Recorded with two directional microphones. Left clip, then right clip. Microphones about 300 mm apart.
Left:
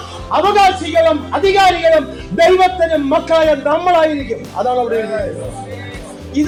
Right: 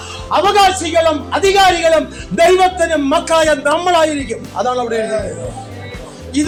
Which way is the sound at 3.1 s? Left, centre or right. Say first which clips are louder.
Even; right.